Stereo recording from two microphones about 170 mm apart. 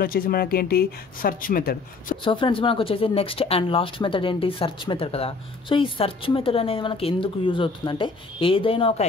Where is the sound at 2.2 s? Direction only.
30° left (ahead or behind).